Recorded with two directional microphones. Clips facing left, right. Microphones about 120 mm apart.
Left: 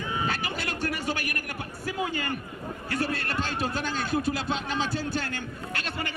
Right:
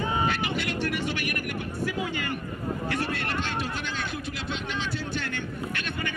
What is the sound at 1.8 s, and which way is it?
A man's voice, 40° left (ahead or behind).